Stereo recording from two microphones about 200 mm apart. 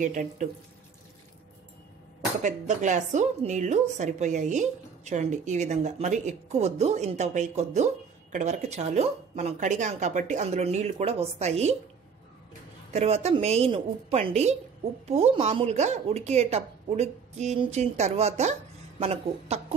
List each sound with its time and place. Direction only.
0.0 s speech: 40° right (ahead or behind)
2.4 s speech: 35° right (ahead or behind)
12.9 s speech: 30° right (ahead or behind)